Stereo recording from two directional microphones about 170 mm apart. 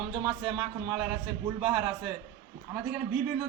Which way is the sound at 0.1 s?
20° right (ahead or behind).